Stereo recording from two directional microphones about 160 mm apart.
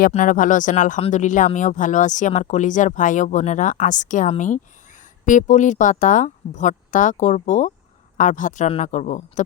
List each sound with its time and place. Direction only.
0.1 s speech: 50° left (ahead or behind)